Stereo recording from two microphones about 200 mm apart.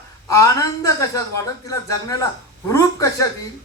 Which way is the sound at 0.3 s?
15° left (ahead or behind).